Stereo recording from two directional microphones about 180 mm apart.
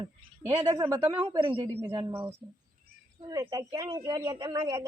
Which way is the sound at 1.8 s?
20° right (ahead or behind).